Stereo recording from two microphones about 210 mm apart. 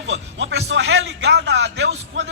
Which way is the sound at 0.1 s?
65° right (ahead or behind).